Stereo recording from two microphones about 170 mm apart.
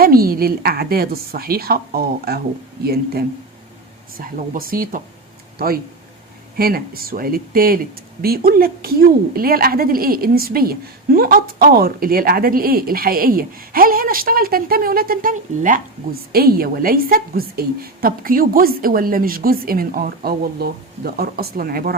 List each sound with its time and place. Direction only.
0.0 s a woman's voice: 60° right (ahead or behind)
16.3 s a woman's voice: 65° right (ahead or behind)